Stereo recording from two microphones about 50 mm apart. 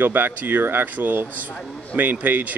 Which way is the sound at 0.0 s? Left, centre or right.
Right.